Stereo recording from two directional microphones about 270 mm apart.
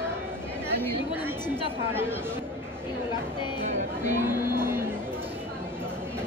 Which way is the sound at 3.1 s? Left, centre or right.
Centre.